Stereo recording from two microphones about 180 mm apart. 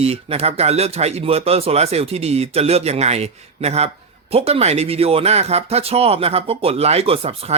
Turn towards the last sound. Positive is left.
turn(degrees=-35)  # may be behind; listen again after turning